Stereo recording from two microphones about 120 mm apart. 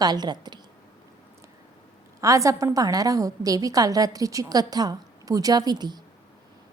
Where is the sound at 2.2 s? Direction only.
25° right (ahead or behind).